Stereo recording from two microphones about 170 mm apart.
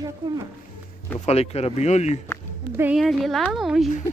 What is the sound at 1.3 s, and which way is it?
Speech, 35° left (ahead or behind).